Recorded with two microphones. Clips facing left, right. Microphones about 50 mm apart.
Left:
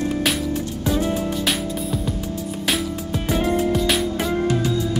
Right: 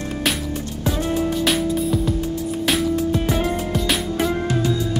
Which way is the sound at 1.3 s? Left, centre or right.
Centre.